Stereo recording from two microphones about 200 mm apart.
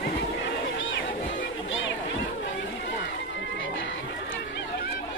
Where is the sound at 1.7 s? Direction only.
75° left (ahead or behind).